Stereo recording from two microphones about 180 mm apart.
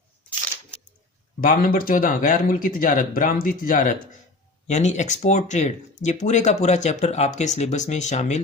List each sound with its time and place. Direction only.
1.4 s speech: 50° left (ahead or behind)